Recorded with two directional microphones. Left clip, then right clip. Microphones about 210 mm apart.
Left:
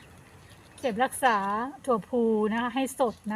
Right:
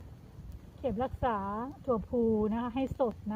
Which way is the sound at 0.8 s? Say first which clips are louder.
Left 7 dB; 25° left (ahead or behind).